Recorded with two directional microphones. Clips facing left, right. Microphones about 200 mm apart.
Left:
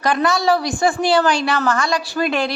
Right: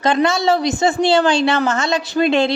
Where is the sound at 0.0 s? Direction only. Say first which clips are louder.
Right 2 dB; 25° right (ahead or behind).